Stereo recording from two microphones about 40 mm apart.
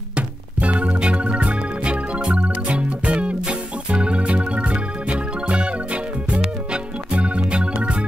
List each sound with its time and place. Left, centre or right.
0.1 s music: right